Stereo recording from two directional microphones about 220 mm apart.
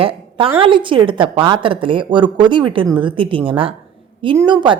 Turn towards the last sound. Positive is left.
turn(degrees=-20)  # may be behind; listen again after turning